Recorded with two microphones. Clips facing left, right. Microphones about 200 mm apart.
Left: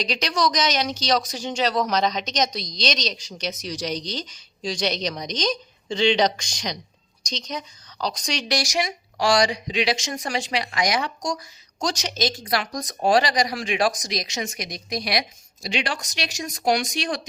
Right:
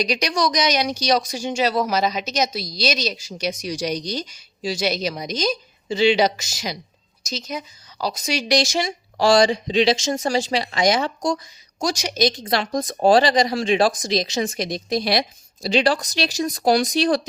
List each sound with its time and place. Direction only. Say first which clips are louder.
0.0 s speech: right 2 dB; 10° right (ahead or behind)
8.5 s speech: right 5 dB; 25° right (ahead or behind)
11.8 s speech: right 4 dB; 10° right (ahead or behind); by 17.2 s 35° right (ahead or behind)